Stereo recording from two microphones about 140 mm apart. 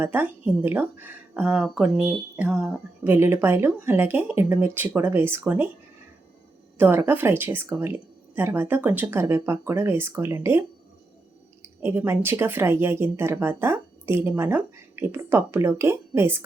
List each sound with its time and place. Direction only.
0.0 s speech: 15° right (ahead or behind)
6.7 s speech: 15° right (ahead or behind)
11.6 s speech: 15° right (ahead or behind)